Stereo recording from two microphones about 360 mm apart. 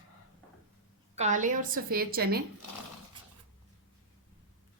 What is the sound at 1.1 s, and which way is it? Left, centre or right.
A woman's voice, centre.